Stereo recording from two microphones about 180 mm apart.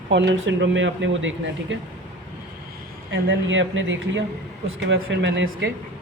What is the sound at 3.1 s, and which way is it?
Speech, 90° right.